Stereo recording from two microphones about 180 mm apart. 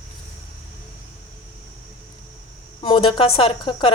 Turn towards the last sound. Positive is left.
turn(degrees=30)  # may be behind; listen again after turning